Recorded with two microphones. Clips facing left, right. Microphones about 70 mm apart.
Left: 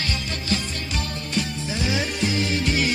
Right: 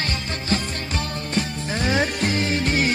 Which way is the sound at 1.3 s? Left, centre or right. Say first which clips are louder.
Right 1 dB; right.